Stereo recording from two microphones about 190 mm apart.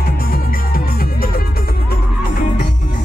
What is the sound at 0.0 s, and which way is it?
Music, 50° left (ahead or behind).